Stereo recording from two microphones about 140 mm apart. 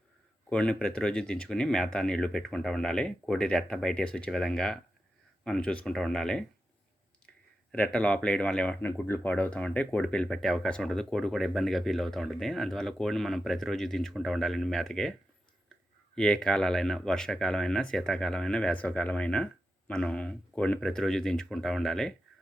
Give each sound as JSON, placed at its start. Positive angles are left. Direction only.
{"t": 0.5, "sound": "speech", "side_deg": 5}
{"t": 7.7, "sound": "speech", "side_deg": 5}
{"t": 16.1, "sound": "speech", "side_deg": 5}